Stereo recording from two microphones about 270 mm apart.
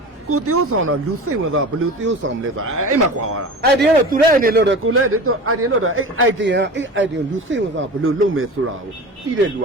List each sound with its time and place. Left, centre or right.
0.3 s a man's voice: right
3.6 s a man's voice: right